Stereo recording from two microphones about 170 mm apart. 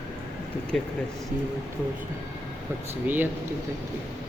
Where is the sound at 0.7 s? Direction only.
Centre (ahead or behind).